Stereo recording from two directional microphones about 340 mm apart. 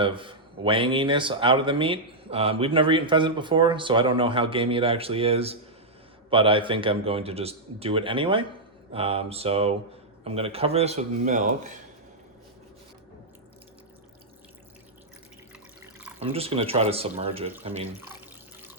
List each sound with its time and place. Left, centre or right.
0.0 s a man's voice: centre
16.3 s a man's voice: centre